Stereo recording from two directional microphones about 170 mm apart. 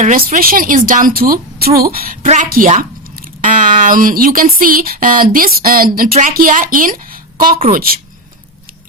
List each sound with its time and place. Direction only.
0.0 s speech: 55° right (ahead or behind)
2.2 s a woman's voice: 45° right (ahead or behind); by 7.9 s 60° right (ahead or behind)